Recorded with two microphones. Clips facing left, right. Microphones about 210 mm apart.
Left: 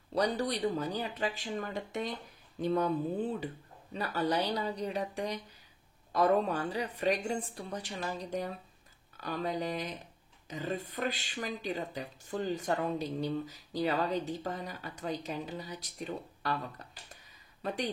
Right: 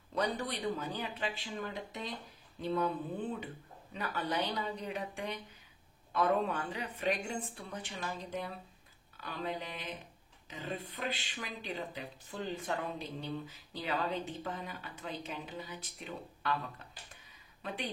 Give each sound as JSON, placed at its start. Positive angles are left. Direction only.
{"t": 0.1, "sound": "speech", "side_deg": 35}